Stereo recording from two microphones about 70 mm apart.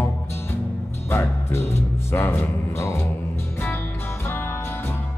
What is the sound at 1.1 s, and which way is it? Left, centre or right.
Speech, left.